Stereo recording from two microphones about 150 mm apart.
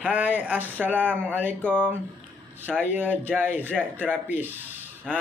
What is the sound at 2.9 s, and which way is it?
Speech, 15° right (ahead or behind).